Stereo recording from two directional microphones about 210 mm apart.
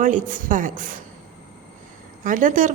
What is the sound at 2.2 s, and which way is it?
Speech, 40° right (ahead or behind).